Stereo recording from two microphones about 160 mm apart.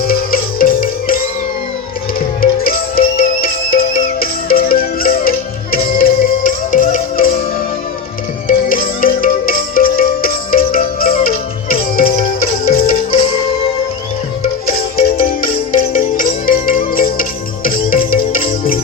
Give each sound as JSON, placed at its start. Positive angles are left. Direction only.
{"t": 0.1, "sound": "music", "side_deg": 65}
{"t": 8.4, "sound": "music", "side_deg": 60}
{"t": 14.9, "sound": "music", "side_deg": 60}